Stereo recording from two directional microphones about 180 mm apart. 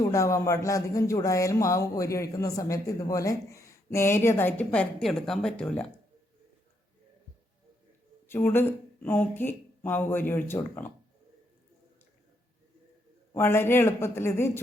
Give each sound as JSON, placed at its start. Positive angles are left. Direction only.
{"t": 0.0, "sound": "speech", "side_deg": 15}
{"t": 8.3, "sound": "speech", "side_deg": 10}
{"t": 13.3, "sound": "speech", "side_deg": 15}